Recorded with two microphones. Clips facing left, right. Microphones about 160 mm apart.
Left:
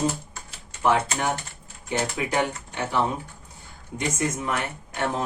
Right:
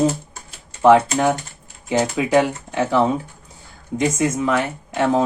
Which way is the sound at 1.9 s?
90° right.